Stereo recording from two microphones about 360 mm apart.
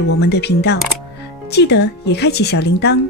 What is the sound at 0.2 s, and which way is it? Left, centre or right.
Speech, left.